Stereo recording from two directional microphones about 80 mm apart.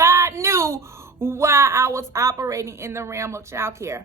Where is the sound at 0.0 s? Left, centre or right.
Right.